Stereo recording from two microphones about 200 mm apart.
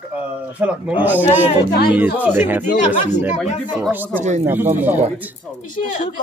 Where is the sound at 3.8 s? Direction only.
10° right (ahead or behind).